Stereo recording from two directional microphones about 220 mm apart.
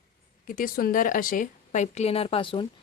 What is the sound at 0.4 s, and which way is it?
A woman's voice, 40° left (ahead or behind).